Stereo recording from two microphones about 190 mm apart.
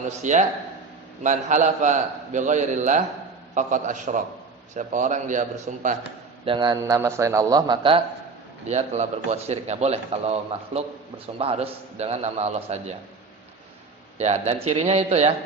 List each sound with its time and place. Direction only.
0.2 s a man's voice: 40° right (ahead or behind)
6.4 s a man's voice: 25° right (ahead or behind)
8.6 s a man's voice: 35° right (ahead or behind)
11.3 s a man's voice: 30° right (ahead or behind)
14.2 s a man's voice: 35° right (ahead or behind)